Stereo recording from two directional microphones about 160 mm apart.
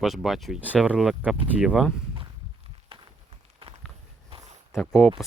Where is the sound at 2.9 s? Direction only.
35° right (ahead or behind).